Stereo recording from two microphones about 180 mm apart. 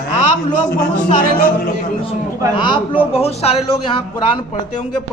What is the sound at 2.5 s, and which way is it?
A man's voice, 25° left (ahead or behind).